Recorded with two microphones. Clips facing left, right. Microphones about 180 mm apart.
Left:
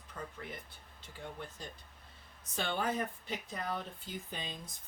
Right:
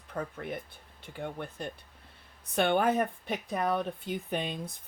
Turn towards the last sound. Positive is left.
turn(degrees=-65)  # may be behind; listen again after turning